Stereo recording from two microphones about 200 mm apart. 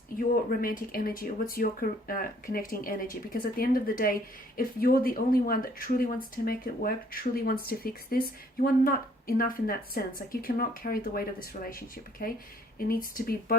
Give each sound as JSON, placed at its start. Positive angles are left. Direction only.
{"t": 0.2, "sound": "speech", "side_deg": 45}